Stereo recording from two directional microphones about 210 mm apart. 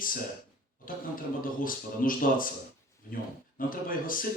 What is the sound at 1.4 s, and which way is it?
Speech, 40° left (ahead or behind).